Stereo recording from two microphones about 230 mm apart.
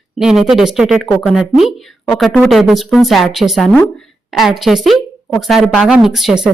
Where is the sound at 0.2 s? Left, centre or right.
Centre.